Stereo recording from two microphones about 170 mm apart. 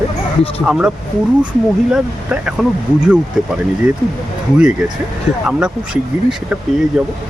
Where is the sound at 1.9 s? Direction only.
5° right (ahead or behind).